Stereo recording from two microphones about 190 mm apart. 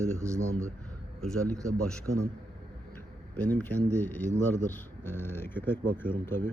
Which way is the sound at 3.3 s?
10° left (ahead or behind).